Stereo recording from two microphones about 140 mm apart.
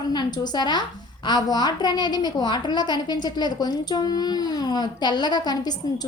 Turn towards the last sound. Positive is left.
turn(degrees=30)  # may be behind; listen again after turning